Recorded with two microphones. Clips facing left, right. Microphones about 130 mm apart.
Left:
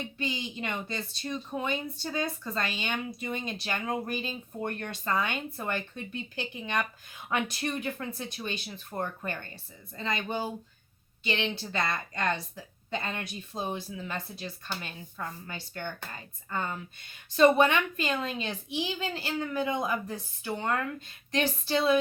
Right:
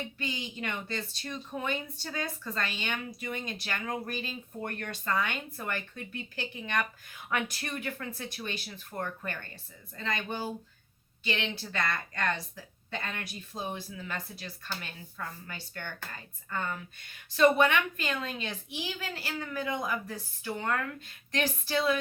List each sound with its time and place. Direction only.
0.0 s speech: 20° left (ahead or behind)